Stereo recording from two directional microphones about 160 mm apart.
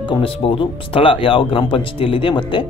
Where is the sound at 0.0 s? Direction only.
35° left (ahead or behind).